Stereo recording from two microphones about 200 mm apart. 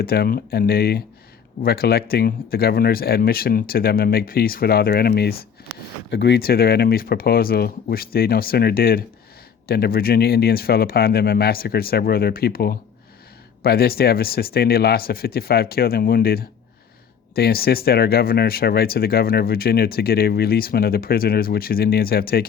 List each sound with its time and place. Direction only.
0.0 s speech: 50° left (ahead or behind)